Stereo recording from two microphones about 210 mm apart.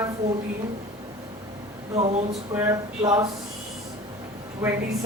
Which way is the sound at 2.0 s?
30° right (ahead or behind).